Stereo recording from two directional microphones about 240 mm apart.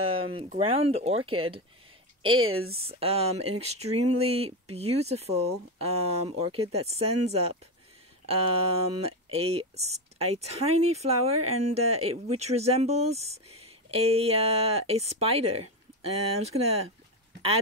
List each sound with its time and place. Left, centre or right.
0.0 s speech: right